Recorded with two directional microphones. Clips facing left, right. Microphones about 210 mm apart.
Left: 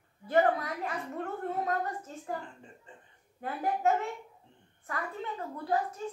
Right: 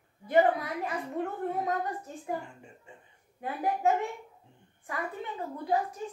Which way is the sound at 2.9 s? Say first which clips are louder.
Right 1 dB; 10° right (ahead or behind).